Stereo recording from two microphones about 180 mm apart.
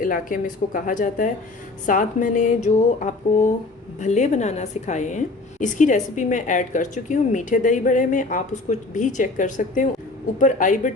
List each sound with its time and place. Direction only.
0.0 s a woman's voice: 50° left (ahead or behind)